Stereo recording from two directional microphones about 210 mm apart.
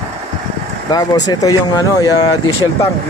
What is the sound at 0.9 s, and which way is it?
Speech, 20° left (ahead or behind).